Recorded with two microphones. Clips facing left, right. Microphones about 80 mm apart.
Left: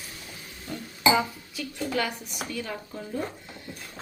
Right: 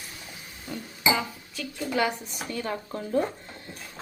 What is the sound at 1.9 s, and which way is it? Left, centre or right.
Speech, right.